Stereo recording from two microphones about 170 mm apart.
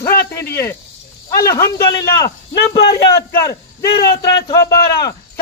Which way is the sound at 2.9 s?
20° left (ahead or behind).